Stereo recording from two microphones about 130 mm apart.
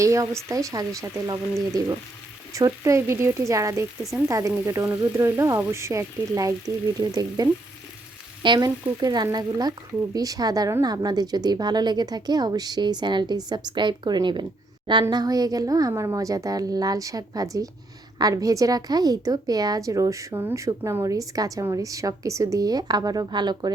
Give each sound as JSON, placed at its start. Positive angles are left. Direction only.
{"t": 0.0, "sound": "a woman's voice", "side_deg": -25}
{"t": 2.5, "sound": "a woman's voice", "side_deg": -25}
{"t": 8.4, "sound": "frying", "side_deg": -35}
{"t": 9.0, "sound": "a woman's voice", "side_deg": -30}